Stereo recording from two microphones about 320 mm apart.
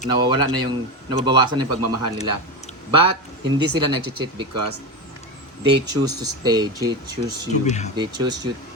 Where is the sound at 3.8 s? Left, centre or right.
Right.